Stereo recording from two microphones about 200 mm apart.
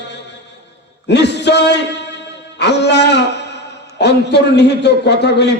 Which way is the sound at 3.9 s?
55° left (ahead or behind).